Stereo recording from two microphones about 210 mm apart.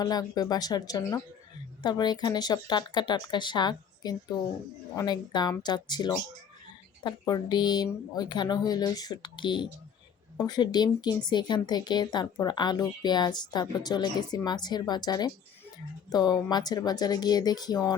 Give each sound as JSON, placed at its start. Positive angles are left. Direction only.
{"t": 0.0, "sound": "speech", "side_deg": 20}